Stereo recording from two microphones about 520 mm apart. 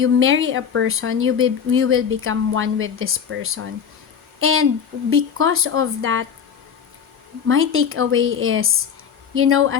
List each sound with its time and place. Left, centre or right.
0.0 s speech: right
7.4 s speech: right